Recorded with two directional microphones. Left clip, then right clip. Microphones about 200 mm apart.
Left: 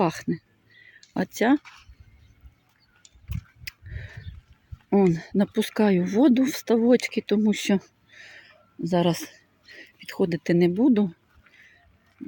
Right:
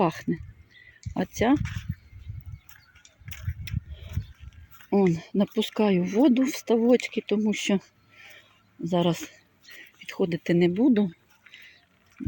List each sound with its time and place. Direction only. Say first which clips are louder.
0.0 s speech: left 1 dB; 5° left (ahead or behind)
1.5 s speech: left 1 dB; 5° right (ahead or behind)
4.9 s speech: left 2 dB; 10° left (ahead or behind)